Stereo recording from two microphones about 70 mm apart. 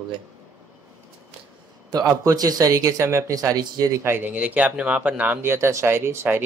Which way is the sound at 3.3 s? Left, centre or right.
Right.